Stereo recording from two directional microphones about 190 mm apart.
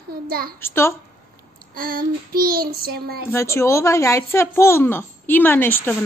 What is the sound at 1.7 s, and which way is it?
Child singing, 50° right (ahead or behind).